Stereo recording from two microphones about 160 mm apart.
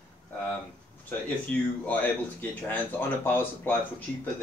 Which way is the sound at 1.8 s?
10° left (ahead or behind).